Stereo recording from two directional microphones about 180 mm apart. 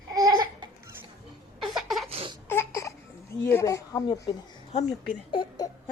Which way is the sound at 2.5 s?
15° left (ahead or behind).